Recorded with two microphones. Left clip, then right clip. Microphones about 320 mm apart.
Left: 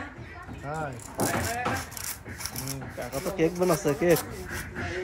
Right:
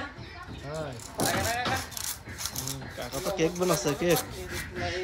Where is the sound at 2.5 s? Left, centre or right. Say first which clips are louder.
Even; centre.